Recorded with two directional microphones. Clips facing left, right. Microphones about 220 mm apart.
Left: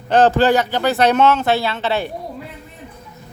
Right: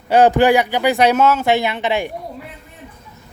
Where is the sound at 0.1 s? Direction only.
15° right (ahead or behind).